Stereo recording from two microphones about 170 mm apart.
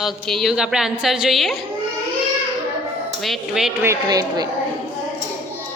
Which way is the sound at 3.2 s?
Centre (ahead or behind).